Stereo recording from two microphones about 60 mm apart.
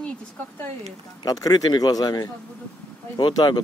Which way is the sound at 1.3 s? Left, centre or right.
Left.